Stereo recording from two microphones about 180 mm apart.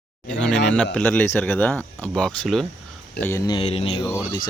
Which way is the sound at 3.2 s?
70° left (ahead or behind).